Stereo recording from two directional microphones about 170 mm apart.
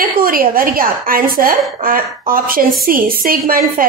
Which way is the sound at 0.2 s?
55° right (ahead or behind).